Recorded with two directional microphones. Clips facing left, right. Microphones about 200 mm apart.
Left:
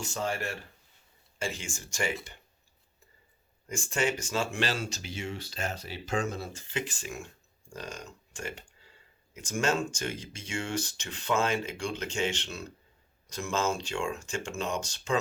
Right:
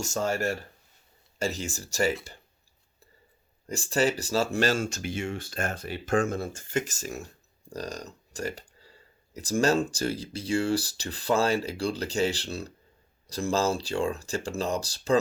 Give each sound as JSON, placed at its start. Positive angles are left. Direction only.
{"t": 0.0, "sound": "speech", "side_deg": -45}
{"t": 3.7, "sound": "speech", "side_deg": -35}